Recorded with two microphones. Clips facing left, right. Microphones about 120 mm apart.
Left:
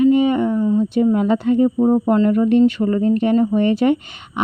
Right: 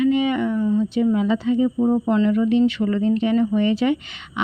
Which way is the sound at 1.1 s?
55° left (ahead or behind).